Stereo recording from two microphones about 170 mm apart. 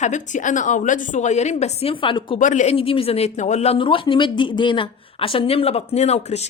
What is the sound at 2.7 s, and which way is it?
Speech, 35° left (ahead or behind).